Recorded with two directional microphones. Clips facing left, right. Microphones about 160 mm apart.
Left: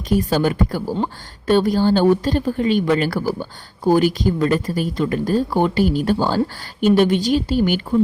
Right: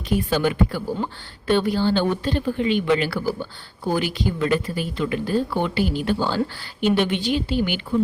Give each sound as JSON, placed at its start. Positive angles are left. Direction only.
{"t": 0.1, "sound": "a woman's voice", "side_deg": 40}